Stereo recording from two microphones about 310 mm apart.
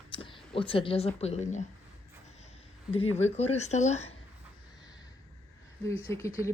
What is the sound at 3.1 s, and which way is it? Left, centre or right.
Speech, left.